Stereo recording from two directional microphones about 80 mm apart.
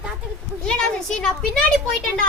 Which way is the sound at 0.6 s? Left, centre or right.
Centre.